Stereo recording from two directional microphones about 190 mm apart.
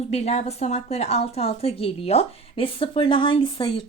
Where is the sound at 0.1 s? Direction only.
35° left (ahead or behind).